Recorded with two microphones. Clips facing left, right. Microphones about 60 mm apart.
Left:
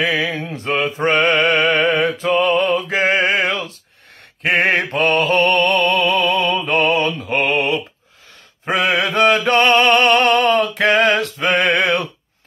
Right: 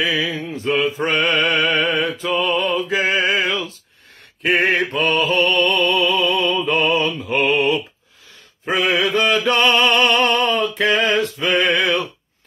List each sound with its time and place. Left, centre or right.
0.0 s mantra: left
4.4 s mantra: left
8.7 s chant: left
9.8 s a sound: left